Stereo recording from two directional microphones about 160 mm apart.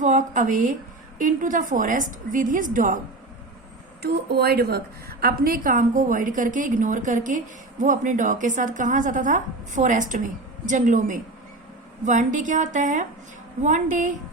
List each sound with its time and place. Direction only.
0.0 s a woman's voice: 50° right (ahead or behind)
4.0 s a woman's voice: 90° right; by 14.1 s 50° right (ahead or behind)